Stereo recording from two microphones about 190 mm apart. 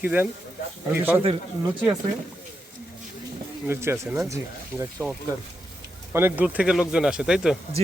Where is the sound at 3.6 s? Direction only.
15° right (ahead or behind).